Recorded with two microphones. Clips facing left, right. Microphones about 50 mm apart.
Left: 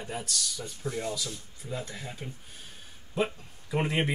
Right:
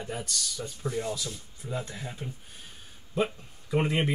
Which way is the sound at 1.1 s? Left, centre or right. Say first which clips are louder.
Right 1 dB; centre.